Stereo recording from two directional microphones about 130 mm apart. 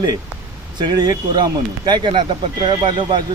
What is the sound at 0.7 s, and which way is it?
Speech, 35° right (ahead or behind).